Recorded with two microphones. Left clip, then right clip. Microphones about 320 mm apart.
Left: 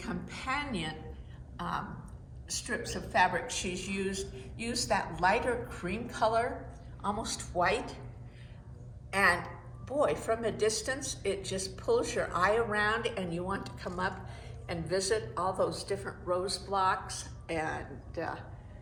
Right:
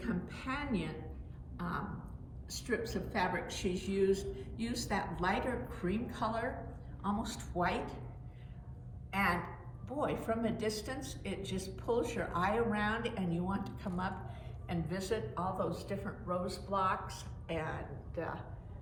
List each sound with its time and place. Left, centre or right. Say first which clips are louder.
0.0 s a sound: left 3 dB; left
1.5 s a woman's voice: left 4 dB; left
9.0 s a woman's voice: left 6 dB; left